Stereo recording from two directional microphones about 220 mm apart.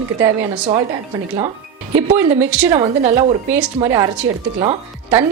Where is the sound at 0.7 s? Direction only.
20° right (ahead or behind).